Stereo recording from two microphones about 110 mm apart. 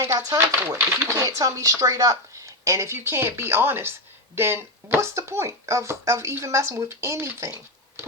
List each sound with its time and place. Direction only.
0.0 s speech: 30° right (ahead or behind)